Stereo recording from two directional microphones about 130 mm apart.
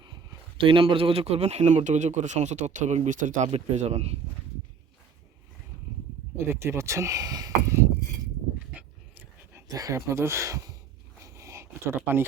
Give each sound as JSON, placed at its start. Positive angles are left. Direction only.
{"t": 0.0, "sound": "a man's voice", "side_deg": -35}
{"t": 6.3, "sound": "speech", "side_deg": -20}
{"t": 9.5, "sound": "speech", "side_deg": -20}
{"t": 11.2, "sound": "a sound", "side_deg": -25}